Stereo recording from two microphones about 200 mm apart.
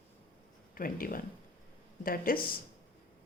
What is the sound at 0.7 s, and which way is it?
Speech, 45° left (ahead or behind).